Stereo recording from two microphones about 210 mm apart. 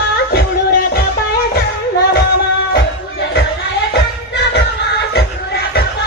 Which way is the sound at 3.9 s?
55° left (ahead or behind).